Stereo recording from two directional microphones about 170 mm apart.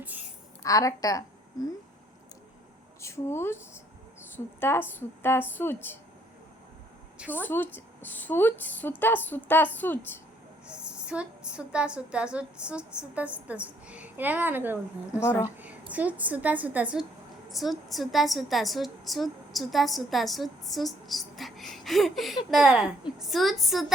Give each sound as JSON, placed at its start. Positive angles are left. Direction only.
{"t": 0.0, "sound": "a sound", "side_deg": -10}
{"t": 0.6, "sound": "a woman's voice", "side_deg": 20}
{"t": 3.0, "sound": "a woman's voice", "side_deg": 15}
{"t": 7.3, "sound": "a woman's voice", "side_deg": 10}
{"t": 10.7, "sound": "a woman's voice", "side_deg": -5}
{"t": 15.2, "sound": "a woman's voice", "side_deg": 15}
{"t": 15.5, "sound": "a woman's voice", "side_deg": -10}